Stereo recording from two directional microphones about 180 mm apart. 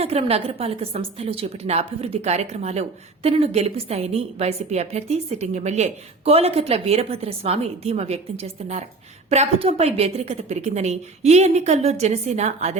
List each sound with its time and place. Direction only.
0.0 s a woman's voice: 35° right (ahead or behind)